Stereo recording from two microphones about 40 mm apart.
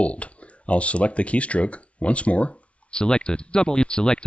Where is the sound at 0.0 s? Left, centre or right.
Left.